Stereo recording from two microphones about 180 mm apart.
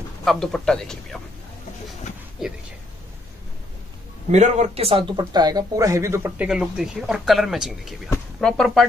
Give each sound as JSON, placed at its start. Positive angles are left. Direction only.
{"t": 0.2, "sound": "speech", "side_deg": 0}
{"t": 4.3, "sound": "speech", "side_deg": -40}